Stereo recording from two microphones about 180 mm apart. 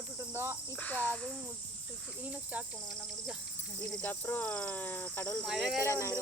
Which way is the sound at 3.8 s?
10° left (ahead or behind).